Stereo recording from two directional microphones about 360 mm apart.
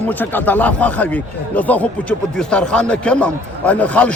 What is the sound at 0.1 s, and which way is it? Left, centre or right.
Speech, centre.